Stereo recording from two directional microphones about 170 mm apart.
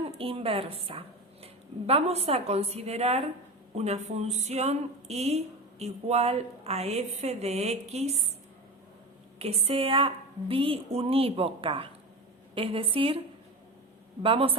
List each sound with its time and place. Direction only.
0.2 s speech: 35° right (ahead or behind)
9.4 s speech: 35° right (ahead or behind)
14.2 s speech: 30° right (ahead or behind)